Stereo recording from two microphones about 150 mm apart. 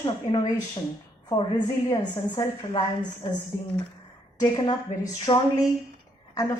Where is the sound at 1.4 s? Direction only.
30° left (ahead or behind).